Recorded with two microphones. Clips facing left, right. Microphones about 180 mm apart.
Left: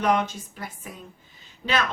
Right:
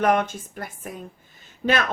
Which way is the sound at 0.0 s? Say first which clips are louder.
Right 2 dB; 50° right (ahead or behind).